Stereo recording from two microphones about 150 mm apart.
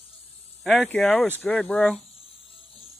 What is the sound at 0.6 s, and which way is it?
Speech, 5° left (ahead or behind).